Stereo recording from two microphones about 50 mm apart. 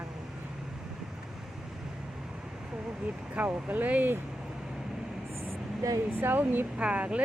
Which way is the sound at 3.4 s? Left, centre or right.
Right.